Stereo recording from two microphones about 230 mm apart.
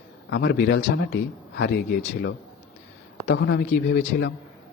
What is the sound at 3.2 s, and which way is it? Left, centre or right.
Speech, left.